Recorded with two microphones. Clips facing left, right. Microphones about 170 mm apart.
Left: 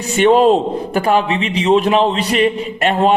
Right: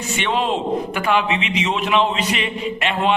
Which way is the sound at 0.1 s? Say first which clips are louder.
Left 11 dB; 40° left (ahead or behind).